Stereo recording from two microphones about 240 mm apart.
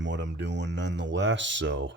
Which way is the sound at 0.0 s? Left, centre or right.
Right.